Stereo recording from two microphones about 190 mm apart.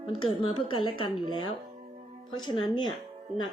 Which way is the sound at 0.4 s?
25° left (ahead or behind).